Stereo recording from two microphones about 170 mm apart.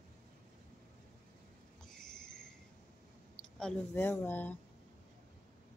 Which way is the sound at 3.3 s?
5° left (ahead or behind).